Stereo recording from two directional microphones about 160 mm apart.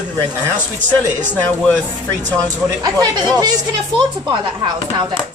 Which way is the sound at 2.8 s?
25° right (ahead or behind).